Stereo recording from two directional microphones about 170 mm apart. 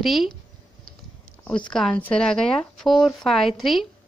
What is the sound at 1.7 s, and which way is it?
A woman's voice, 5° left (ahead or behind).